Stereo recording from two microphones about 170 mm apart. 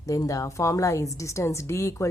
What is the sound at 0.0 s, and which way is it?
A woman's voice, 20° left (ahead or behind).